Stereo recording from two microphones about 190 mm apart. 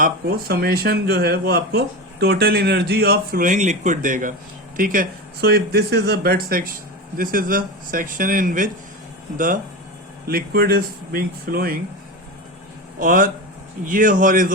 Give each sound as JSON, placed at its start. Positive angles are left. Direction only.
{"t": 0.0, "sound": "speech", "side_deg": -55}
{"t": 10.2, "sound": "speech", "side_deg": -50}
{"t": 13.0, "sound": "speech", "side_deg": -45}